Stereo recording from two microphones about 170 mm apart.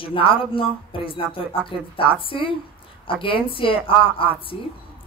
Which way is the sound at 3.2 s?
30° left (ahead or behind).